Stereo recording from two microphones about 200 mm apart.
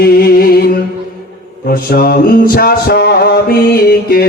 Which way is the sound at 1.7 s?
50° left (ahead or behind).